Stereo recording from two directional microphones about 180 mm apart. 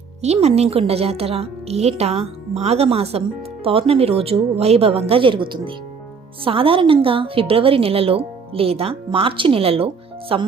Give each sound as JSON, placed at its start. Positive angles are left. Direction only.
{"t": 0.4, "sound": "speech", "side_deg": -35}